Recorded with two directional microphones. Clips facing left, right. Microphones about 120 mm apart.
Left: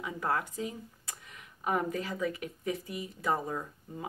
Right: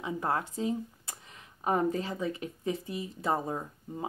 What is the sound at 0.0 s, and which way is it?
Speech, 25° right (ahead or behind).